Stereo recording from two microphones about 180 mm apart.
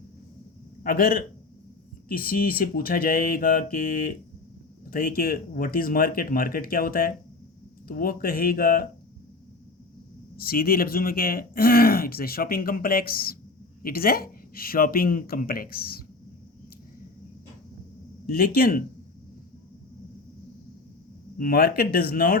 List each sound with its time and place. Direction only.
0.8 s a man's voice: 55° left (ahead or behind)
2.0 s mantra: 55° left (ahead or behind)
4.9 s speech: 55° left (ahead or behind)
10.3 s speech: 55° left (ahead or behind)
18.3 s speech: 55° left (ahead or behind)
21.3 s speech: 55° left (ahead or behind)